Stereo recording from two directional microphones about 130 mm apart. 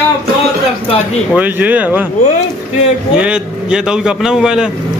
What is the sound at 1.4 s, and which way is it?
Speech, 10° right (ahead or behind).